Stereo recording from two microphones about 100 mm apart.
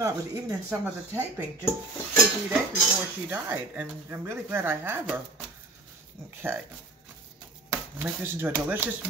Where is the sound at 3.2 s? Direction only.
20° right (ahead or behind).